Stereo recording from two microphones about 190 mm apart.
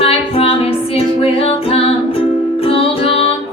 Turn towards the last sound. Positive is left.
turn(degrees=30)  # may be behind; listen again after turning